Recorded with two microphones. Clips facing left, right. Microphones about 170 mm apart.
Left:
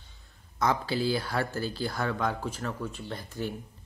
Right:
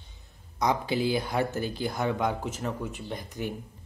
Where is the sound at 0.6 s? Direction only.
20° right (ahead or behind).